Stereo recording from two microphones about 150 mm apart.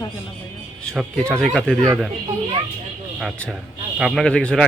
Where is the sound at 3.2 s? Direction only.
Centre (ahead or behind).